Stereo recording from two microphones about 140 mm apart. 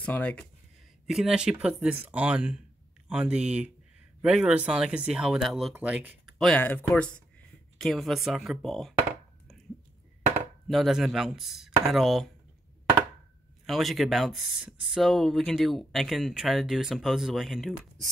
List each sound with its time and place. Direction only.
0.0 s speech: 10° left (ahead or behind)
1.0 s speech: centre (ahead or behind)
5.8 s speech: 10° right (ahead or behind)
6.2 s a sound: 5° left (ahead or behind)
6.9 s speech: 10° left (ahead or behind)
10.7 s speech: centre (ahead or behind)
13.7 s speech: centre (ahead or behind)